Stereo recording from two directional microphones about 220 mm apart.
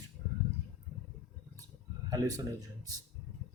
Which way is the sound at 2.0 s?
15° right (ahead or behind).